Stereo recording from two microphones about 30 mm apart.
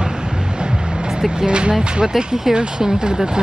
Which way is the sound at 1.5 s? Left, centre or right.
Right.